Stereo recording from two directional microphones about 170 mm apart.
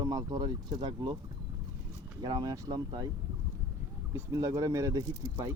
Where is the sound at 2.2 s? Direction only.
25° right (ahead or behind).